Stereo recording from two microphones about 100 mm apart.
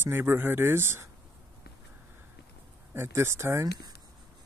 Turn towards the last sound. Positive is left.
turn(degrees=-25)  # may be behind; listen again after turning